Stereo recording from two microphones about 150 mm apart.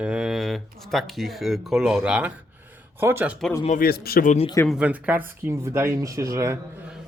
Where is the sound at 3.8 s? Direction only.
90° left.